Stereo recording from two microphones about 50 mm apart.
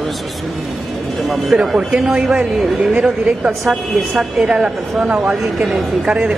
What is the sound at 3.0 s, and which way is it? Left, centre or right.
A woman's voice, centre.